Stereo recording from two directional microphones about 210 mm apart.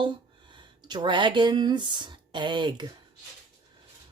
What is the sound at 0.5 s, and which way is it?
Speech, 20° right (ahead or behind).